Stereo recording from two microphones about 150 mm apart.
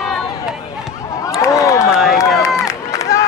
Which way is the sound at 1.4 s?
20° left (ahead or behind).